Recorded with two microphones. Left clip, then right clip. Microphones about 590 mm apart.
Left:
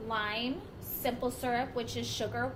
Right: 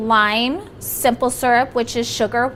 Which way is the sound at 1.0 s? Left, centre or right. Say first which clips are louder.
Right 17 dB; right.